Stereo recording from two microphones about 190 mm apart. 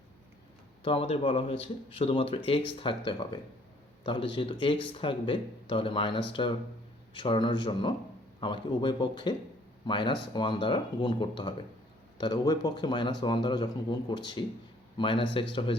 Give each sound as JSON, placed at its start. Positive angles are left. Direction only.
{"t": 0.9, "sound": "speech", "side_deg": 30}